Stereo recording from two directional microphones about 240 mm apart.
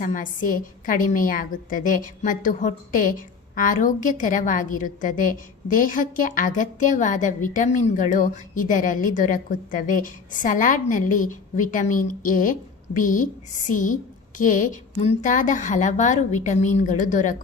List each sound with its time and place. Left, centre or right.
0.0 s a woman's voice: left